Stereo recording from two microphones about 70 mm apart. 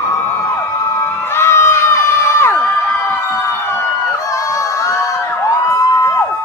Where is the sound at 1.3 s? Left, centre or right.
Left.